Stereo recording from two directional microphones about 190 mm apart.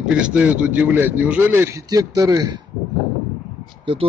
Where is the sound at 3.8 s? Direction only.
30° right (ahead or behind).